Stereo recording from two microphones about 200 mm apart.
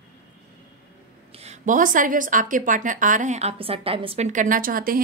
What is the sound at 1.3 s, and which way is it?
A woman's voice, 35° right (ahead or behind).